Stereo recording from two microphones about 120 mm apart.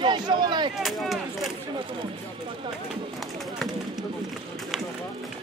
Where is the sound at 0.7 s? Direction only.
Centre (ahead or behind).